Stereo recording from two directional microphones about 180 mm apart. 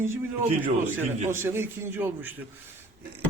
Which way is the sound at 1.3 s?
15° right (ahead or behind).